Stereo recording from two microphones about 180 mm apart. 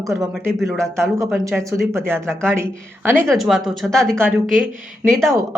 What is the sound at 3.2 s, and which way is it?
A woman's voice, centre (ahead or behind).